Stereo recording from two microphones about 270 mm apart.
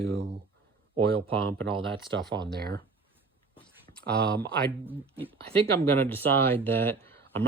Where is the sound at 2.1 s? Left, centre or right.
Right.